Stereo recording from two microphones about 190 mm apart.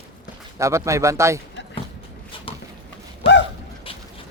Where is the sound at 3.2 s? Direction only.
30° left (ahead or behind).